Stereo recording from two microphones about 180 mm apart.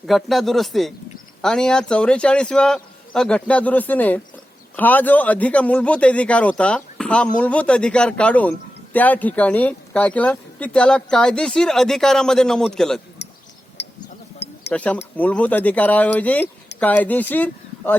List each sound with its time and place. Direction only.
0.1 s a man's voice: centre (ahead or behind)
13.2 s a sound: 70° left (ahead or behind)
14.7 s a man's voice: 5° left (ahead or behind)